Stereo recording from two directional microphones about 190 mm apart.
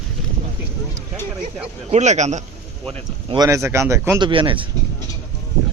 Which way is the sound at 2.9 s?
25° right (ahead or behind).